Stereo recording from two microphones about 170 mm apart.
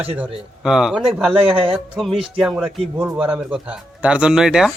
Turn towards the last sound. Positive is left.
turn(degrees=-5)  # may be behind; listen again after turning